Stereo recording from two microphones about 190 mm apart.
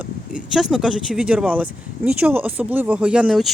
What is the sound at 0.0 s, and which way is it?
Speech, 5° right (ahead or behind).